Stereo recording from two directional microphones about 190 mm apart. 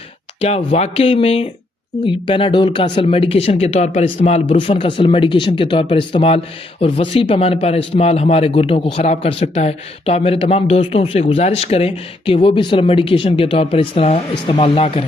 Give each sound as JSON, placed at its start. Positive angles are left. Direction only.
{"t": 0.4, "sound": "speech", "side_deg": 35}